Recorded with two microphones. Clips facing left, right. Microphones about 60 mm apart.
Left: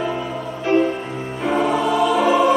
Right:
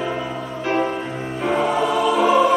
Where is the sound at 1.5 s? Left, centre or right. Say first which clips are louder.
Left 2 dB; centre.